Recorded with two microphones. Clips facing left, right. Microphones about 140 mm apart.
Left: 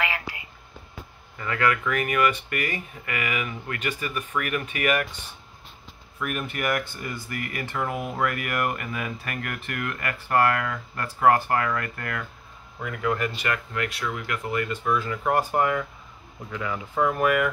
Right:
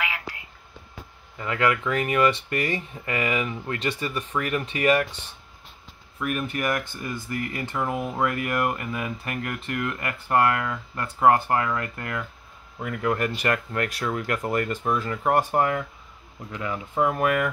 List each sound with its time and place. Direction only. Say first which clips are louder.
0.0 s whispering: left 2 dB; centre (ahead or behind)
1.4 s speech: right 1 dB; 20° right (ahead or behind)
6.1 s speech: right 2 dB; 35° right (ahead or behind)
12.8 s speech: right 1 dB; 45° right (ahead or behind)
15.5 s speech: even; 30° right (ahead or behind)
16.5 s speech: right 1 dB; 15° right (ahead or behind)